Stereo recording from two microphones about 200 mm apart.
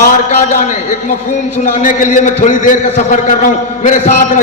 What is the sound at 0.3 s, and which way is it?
A man's voice, 40° left (ahead or behind).